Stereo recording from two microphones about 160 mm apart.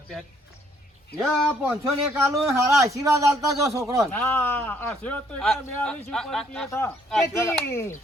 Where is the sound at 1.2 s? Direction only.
10° right (ahead or behind).